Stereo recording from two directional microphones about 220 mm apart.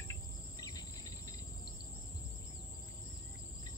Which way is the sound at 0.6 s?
15° left (ahead or behind).